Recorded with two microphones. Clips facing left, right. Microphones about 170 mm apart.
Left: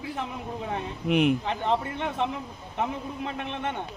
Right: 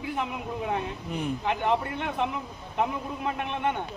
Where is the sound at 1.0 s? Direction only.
80° left.